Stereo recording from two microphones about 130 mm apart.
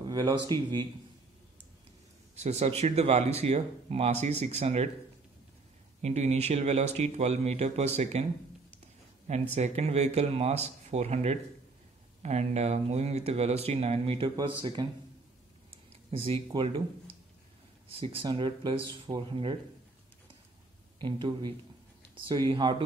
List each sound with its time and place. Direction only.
0.0 s a sound: 35° right (ahead or behind)
0.5 s speech: 35° right (ahead or behind)
2.3 s speech: 55° right (ahead or behind)
5.9 s speech: 60° right (ahead or behind)
9.6 s speech: 55° right (ahead or behind)
14.8 s speech: 30° right (ahead or behind)
15.7 s a sound: 45° right (ahead or behind)
18.0 s speech: 45° right (ahead or behind)
21.0 s speech: 35° right (ahead or behind)
22.5 s speech: 35° right (ahead or behind)